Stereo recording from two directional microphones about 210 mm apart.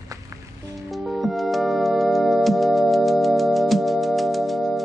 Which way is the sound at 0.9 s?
Centre (ahead or behind).